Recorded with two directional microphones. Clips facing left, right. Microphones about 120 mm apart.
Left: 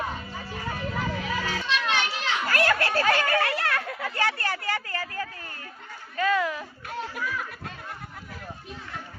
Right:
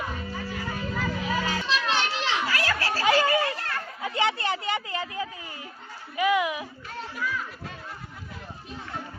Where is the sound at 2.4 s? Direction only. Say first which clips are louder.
Left 3 dB; 55° left (ahead or behind).